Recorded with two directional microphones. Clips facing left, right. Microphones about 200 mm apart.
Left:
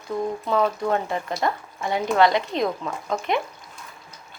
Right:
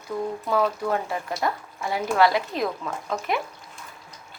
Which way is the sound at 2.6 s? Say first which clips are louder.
Left 2 dB; 20° left (ahead or behind).